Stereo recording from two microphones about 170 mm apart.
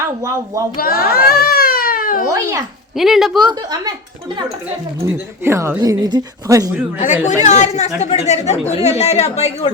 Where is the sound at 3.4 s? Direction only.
25° right (ahead or behind).